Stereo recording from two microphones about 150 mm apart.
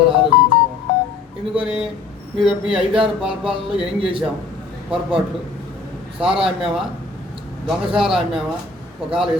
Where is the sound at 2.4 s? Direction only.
5° right (ahead or behind).